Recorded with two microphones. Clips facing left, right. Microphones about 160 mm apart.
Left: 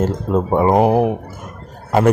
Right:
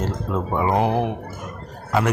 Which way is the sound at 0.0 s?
40° left (ahead or behind).